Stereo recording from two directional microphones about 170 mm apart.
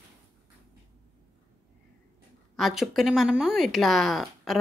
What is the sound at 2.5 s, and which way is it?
A woman's voice, centre (ahead or behind).